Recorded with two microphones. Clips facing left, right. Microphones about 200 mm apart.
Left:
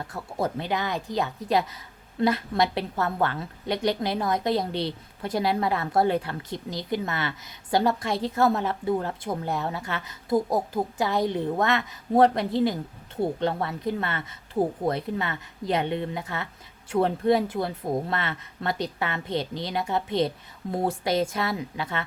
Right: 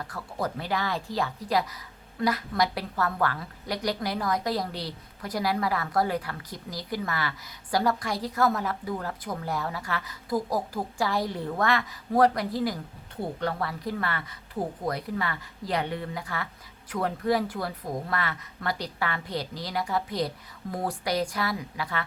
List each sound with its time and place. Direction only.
0.0 s a woman's voice: 25° left (ahead or behind)